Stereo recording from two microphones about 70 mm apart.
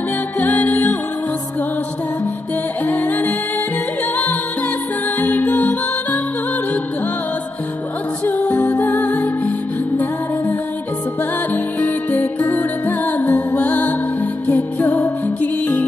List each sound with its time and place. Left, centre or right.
0.4 s music: left
2.9 s music: left
5.2 s music: left
8.3 s music: left
11.5 s music: left